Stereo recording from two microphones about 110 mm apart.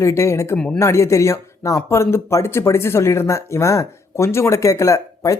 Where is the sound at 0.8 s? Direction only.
25° left (ahead or behind).